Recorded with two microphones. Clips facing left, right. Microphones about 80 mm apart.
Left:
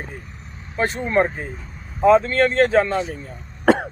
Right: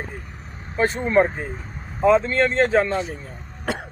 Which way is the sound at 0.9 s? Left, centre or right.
Right.